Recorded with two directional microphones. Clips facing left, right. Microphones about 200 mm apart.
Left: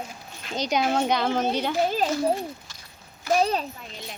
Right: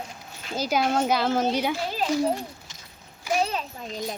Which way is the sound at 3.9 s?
40° right (ahead or behind).